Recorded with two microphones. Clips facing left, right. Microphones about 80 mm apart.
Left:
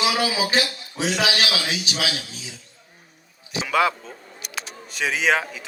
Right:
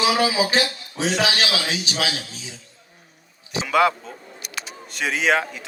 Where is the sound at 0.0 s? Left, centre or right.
Right.